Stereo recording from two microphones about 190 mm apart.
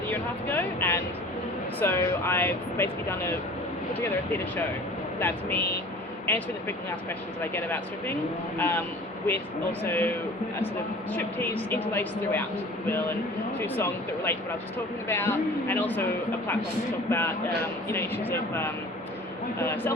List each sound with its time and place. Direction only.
0.1 s speech: 10° left (ahead or behind)
9.8 s speech: 10° left (ahead or behind)
13.6 s speech: 10° left (ahead or behind)
17.1 s speech: 10° left (ahead or behind)